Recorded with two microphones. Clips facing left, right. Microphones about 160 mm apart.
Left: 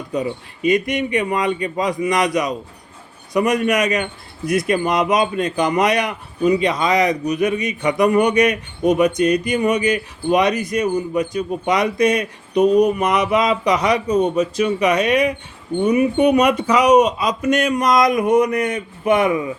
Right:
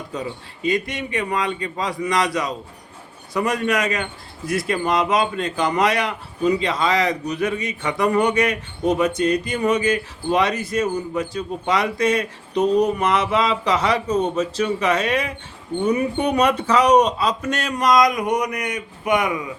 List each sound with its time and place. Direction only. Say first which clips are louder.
0.1 s a man's voice: left 9 dB; 20° left (ahead or behind)